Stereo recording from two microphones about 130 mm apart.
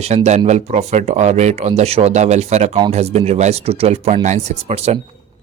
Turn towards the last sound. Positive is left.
turn(degrees=-55)  # may be behind; listen again after turning